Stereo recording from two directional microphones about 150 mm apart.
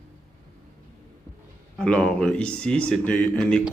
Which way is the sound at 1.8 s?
5° left (ahead or behind).